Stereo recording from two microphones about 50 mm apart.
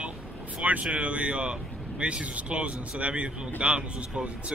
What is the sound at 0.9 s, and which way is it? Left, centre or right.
Speech, right.